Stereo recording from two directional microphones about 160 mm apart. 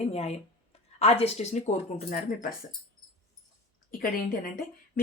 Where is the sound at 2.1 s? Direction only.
55° left (ahead or behind).